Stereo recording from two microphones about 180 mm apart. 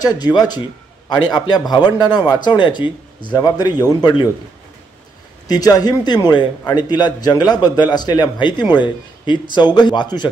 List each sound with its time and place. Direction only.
0.0 s a man's voice: 20° left (ahead or behind)
5.5 s a man's voice: 20° left (ahead or behind)